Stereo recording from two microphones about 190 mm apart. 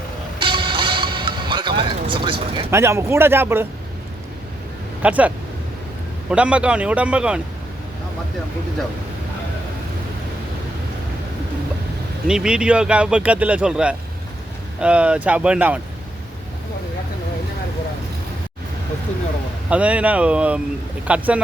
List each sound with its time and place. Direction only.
0.3 s music: 25° right (ahead or behind)
2.6 s speech: 15° right (ahead or behind)
5.0 s speech: 5° right (ahead or behind)
6.3 s speech: 5° right (ahead or behind)
12.3 s speech: 5° right (ahead or behind)
19.7 s speech: 5° right (ahead or behind)